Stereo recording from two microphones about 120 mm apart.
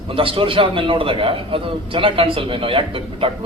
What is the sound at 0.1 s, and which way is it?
A man's voice, 50° right (ahead or behind).